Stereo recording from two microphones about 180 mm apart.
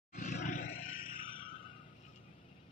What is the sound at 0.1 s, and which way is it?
Roar, 40° left (ahead or behind).